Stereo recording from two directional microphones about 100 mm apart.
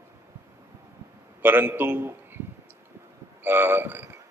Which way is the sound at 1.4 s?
20° right (ahead or behind).